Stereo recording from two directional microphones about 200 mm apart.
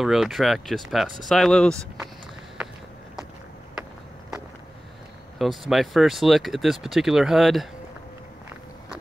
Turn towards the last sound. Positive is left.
turn(degrees=0)  # may be behind; listen again after turning